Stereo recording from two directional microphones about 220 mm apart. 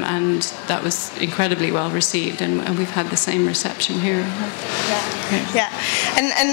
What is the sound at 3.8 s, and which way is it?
Speech, 20° left (ahead or behind).